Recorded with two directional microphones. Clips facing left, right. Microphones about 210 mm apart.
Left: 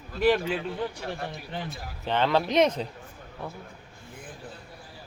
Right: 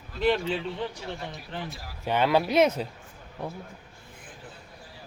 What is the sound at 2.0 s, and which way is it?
Speech, 10° right (ahead or behind).